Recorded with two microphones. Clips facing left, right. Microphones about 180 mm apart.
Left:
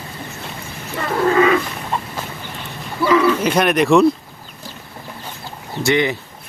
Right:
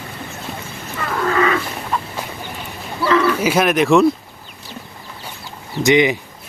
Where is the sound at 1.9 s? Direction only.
30° left (ahead or behind).